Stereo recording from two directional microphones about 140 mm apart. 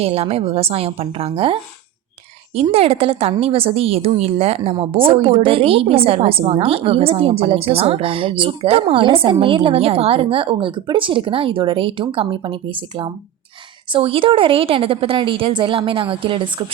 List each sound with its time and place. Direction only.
0.0 s a woman's voice: 45° right (ahead or behind)
2.7 s a woman's voice: 45° right (ahead or behind)